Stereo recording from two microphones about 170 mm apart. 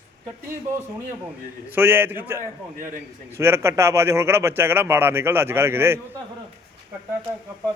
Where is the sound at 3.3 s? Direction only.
15° right (ahead or behind).